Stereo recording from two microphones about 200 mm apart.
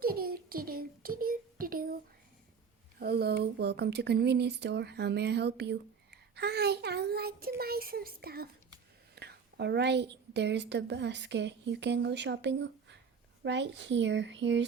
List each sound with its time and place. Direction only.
0.0 s child singing: 50° right (ahead or behind)
3.0 s a woman's voice: 55° right (ahead or behind)